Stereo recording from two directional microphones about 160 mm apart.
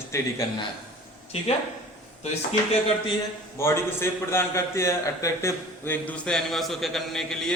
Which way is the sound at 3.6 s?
15° left (ahead or behind).